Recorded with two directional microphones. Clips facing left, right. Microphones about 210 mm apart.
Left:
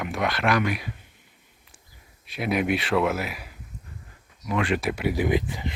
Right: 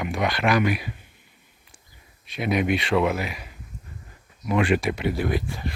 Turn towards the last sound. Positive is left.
turn(degrees=20)  # may be behind; listen again after turning